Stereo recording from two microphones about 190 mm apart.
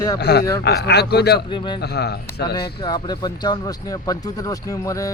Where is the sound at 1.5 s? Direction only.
25° left (ahead or behind).